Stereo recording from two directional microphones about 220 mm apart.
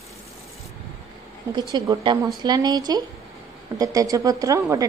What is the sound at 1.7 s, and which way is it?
Speech, 20° right (ahead or behind).